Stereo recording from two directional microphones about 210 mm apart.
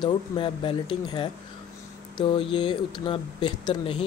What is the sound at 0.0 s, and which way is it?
Speech, 25° left (ahead or behind).